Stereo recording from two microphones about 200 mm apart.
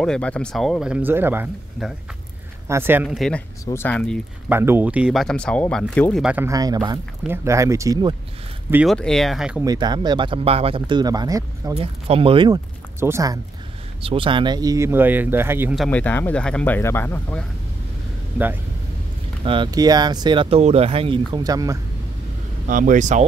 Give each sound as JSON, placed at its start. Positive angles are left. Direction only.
{"t": 0.0, "sound": "speech", "side_deg": 5}
{"t": 4.5, "sound": "speech", "side_deg": -10}
{"t": 6.2, "sound": "speech", "side_deg": -10}
{"t": 8.8, "sound": "speech", "side_deg": 5}
{"t": 9.7, "sound": "speech", "side_deg": -20}
{"t": 11.7, "sound": "speech", "side_deg": -30}
{"t": 13.0, "sound": "speech", "side_deg": -15}
{"t": 14.0, "sound": "speech", "side_deg": -25}
{"t": 15.7, "sound": "speech", "side_deg": 5}
{"t": 19.4, "sound": "speech", "side_deg": -25}
{"t": 22.7, "sound": "speech", "side_deg": -40}